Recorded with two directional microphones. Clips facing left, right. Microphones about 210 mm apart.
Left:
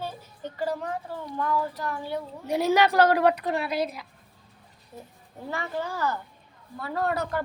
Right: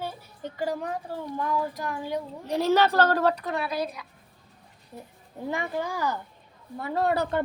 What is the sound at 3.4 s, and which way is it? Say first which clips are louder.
Speech: left 2 dB; 25° left (ahead or behind).